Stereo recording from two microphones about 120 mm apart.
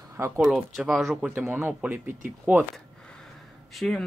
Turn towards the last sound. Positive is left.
turn(degrees=0)  # may be behind; listen again after turning